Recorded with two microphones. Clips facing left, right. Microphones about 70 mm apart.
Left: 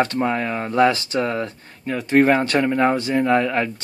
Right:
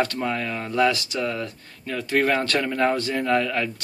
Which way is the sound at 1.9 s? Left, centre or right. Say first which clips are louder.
Left 6 dB; left.